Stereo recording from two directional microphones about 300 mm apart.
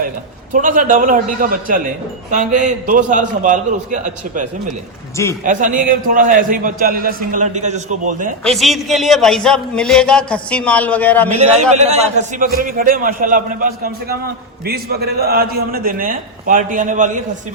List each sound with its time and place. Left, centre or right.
0.5 s a man's voice: right
5.1 s a man's voice: centre
5.5 s a man's voice: right
8.4 s a man's voice: centre
11.3 s a man's voice: right